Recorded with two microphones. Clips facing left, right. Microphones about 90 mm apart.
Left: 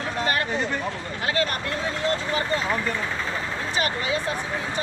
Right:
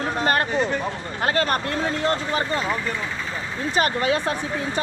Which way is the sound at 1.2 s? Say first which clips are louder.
Right 4 dB; 45° right (ahead or behind).